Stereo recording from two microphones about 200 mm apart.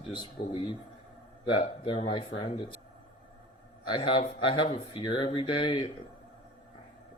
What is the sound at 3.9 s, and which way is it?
Speech, 25° left (ahead or behind).